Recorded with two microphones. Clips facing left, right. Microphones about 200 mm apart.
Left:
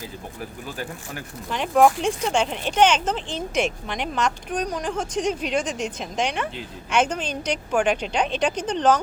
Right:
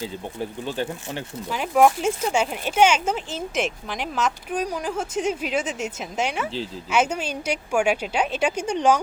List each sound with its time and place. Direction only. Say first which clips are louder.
0.0 s speech: right 5 dB; 25° right (ahead or behind)
1.5 s a woman's voice: even; 5° right (ahead or behind)